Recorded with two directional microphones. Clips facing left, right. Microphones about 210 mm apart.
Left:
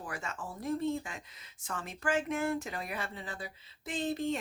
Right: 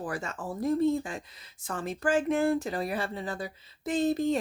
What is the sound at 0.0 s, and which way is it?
Speech, 35° right (ahead or behind).